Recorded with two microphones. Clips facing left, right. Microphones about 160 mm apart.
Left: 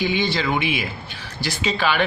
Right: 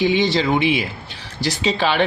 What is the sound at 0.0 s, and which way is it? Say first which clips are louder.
Speech: right 5 dB; 25° right (ahead or behind).